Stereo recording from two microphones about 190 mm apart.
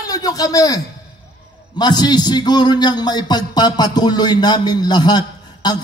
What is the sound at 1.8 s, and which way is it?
A man's voice, 20° left (ahead or behind).